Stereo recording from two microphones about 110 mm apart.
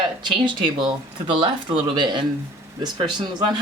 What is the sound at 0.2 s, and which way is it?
Speech, 45° right (ahead or behind).